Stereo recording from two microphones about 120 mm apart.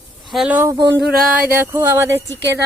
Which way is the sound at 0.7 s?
30° right (ahead or behind).